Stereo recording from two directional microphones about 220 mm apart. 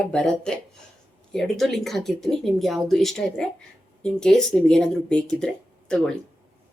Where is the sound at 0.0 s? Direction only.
5° left (ahead or behind).